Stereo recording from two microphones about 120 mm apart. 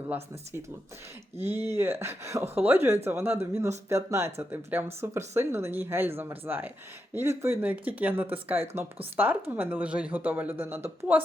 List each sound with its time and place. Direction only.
1.4 s a woman's voice: 20° right (ahead or behind)